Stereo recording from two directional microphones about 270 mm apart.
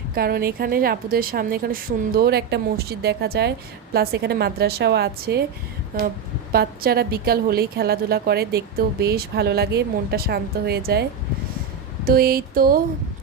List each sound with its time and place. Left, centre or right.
0.1 s a woman's voice: right
6.5 s a woman's voice: right
12.0 s a woman's voice: right